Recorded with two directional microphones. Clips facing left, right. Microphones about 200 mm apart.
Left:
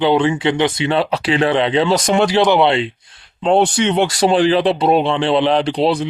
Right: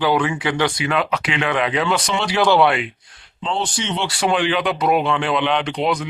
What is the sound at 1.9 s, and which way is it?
Speech, 50° left (ahead or behind).